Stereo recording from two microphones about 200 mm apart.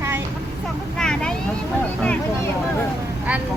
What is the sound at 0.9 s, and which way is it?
Vehicle, 5° left (ahead or behind).